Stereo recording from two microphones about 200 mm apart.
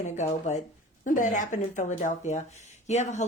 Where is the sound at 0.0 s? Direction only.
35° left (ahead or behind).